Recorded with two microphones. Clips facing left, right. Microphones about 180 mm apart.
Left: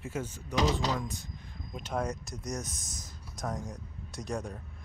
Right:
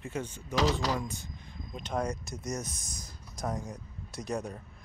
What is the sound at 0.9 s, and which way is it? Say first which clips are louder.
Speech: right 1 dB; centre (ahead or behind).